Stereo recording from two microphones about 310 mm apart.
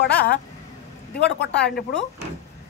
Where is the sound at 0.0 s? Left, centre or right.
Left.